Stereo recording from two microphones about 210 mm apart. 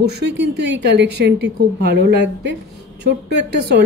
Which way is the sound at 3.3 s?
55° right (ahead or behind).